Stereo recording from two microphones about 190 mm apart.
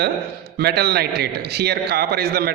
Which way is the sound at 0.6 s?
60° right (ahead or behind).